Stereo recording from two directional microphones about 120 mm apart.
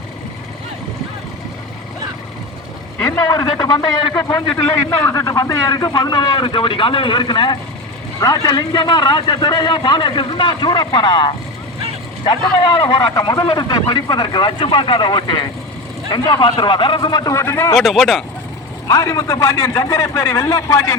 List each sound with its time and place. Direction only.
3.0 s a man's voice: 25° left (ahead or behind)
3.3 s speech: 35° left (ahead or behind)
4.6 s speech: 20° left (ahead or behind); by 17.3 s 35° left (ahead or behind)
17.3 s a man's voice: 20° left (ahead or behind)
17.7 s speech: centre (ahead or behind)
18.9 s a man's voice: 25° left (ahead or behind)